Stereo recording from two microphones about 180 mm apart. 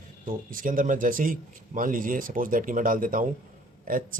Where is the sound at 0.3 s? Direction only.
50° right (ahead or behind).